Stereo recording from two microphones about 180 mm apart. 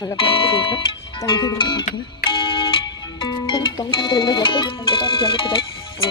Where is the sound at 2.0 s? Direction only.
30° left (ahead or behind).